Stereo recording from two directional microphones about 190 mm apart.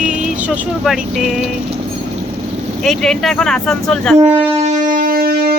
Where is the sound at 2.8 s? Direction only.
Centre (ahead or behind).